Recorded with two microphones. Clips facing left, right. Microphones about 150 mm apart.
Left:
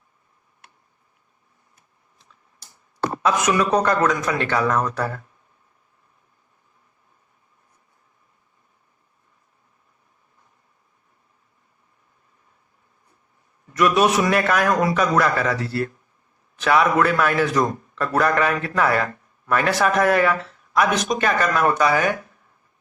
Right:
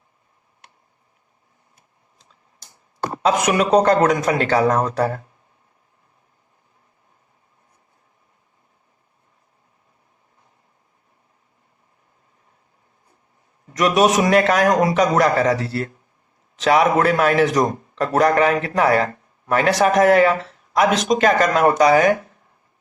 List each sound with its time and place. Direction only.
3.2 s a man's voice: 20° right (ahead or behind)
13.7 s a man's voice: 20° right (ahead or behind)